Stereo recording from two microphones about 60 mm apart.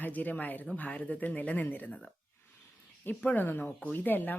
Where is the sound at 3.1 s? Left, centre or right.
Left.